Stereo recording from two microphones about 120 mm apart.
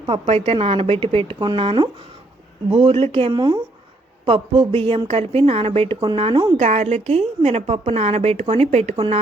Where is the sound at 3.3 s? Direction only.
35° right (ahead or behind).